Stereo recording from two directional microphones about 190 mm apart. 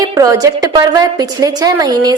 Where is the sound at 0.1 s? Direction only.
20° right (ahead or behind).